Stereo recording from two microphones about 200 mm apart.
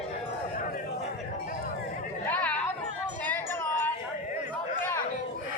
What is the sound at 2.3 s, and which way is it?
Chatter, 5° left (ahead or behind).